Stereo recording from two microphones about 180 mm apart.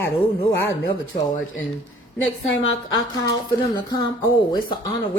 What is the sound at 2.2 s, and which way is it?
Speech, 90° left.